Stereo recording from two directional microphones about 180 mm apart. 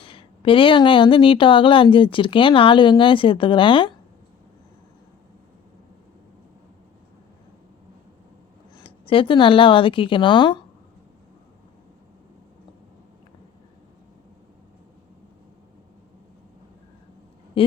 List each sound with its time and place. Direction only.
0.0 s speech: 30° left (ahead or behind)
8.7 s speech: 30° left (ahead or behind)